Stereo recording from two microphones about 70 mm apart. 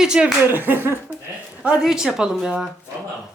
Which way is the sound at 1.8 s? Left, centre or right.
Centre.